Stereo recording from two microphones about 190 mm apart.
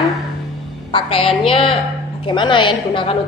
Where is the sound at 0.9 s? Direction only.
30° left (ahead or behind).